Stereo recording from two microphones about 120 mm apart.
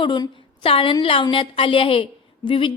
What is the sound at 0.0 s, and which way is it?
A woman's voice, 45° left (ahead or behind).